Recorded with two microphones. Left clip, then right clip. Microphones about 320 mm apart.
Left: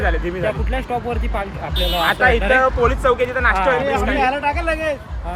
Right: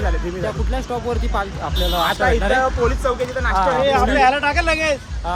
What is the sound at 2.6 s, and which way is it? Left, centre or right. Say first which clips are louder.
Speech: left 3 dB; left.